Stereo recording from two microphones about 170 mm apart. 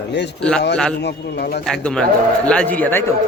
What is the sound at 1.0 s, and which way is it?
Speech, 70° left (ahead or behind).